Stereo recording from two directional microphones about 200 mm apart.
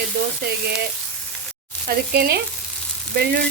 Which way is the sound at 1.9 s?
50° right (ahead or behind).